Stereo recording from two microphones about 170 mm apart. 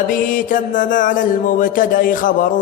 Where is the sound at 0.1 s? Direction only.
50° left (ahead or behind).